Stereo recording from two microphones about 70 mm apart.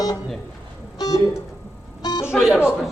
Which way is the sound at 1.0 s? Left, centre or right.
Left.